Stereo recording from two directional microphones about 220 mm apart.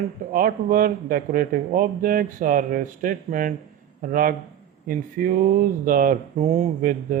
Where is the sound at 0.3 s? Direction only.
40° right (ahead or behind).